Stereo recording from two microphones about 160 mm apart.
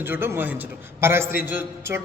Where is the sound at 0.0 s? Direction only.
15° right (ahead or behind).